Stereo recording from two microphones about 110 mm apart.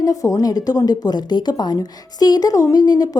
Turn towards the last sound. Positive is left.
turn(degrees=35)  # may be behind; listen again after turning